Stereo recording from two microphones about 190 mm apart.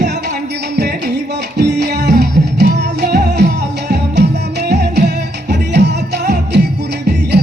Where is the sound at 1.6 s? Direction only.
60° right (ahead or behind).